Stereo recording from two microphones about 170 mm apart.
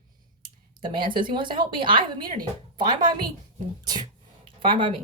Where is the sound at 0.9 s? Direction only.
30° right (ahead or behind).